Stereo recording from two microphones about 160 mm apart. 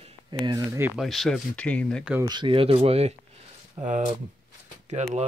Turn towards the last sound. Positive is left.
turn(degrees=-45)  # may be behind; listen again after turning